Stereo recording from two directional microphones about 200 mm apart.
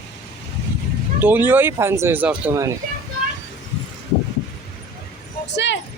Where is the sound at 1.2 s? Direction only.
10° right (ahead or behind).